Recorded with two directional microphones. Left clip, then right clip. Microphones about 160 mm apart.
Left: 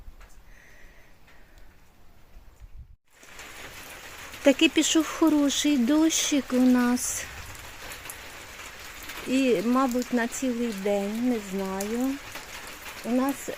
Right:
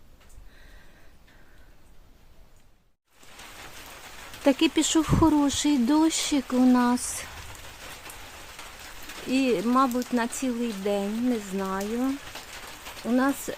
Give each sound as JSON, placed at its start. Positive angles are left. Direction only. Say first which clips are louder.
{"t": 4.4, "sound": "speech", "louder": "left 2 dB", "side_deg": 5}
{"t": 9.3, "sound": "speech", "louder": "even", "side_deg": 5}
{"t": 13.1, "sound": "speech", "louder": "right 2 dB", "side_deg": -20}